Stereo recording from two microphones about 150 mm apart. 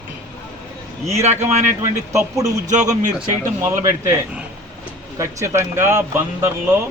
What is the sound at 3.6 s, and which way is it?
Speech, 20° right (ahead or behind).